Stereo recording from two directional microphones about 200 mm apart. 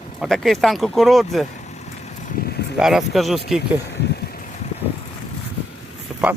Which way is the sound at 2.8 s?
Centre (ahead or behind).